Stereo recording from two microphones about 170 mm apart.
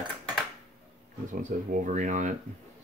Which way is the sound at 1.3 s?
50° right (ahead or behind).